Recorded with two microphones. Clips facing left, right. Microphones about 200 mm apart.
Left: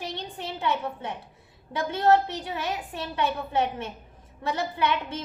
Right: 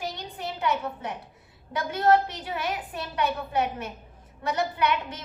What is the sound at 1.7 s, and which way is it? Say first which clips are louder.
A woman's voice: even; 25° left (ahead or behind).